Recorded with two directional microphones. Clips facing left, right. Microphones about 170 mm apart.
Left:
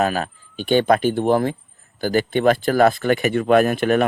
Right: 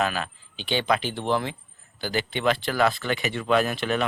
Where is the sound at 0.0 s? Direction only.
45° left (ahead or behind).